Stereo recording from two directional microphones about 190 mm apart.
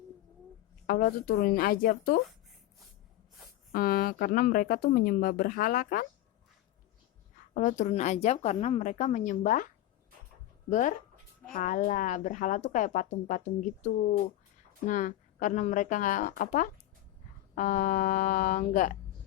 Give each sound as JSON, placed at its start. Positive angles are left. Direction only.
{"t": 0.9, "sound": "speech", "side_deg": 50}
{"t": 3.7, "sound": "speech", "side_deg": 50}
{"t": 7.5, "sound": "a woman's voice", "side_deg": 40}
{"t": 10.7, "sound": "a woman's voice", "side_deg": 40}